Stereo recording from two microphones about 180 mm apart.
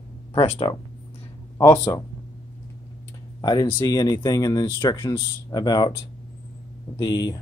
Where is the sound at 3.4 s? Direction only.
25° left (ahead or behind).